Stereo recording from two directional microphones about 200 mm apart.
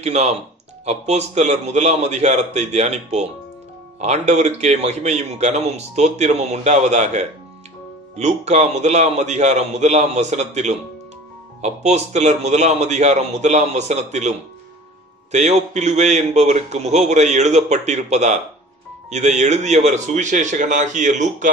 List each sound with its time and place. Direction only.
0.0 s a man's voice: 35° right (ahead or behind)
15.3 s a man's voice: 35° right (ahead or behind)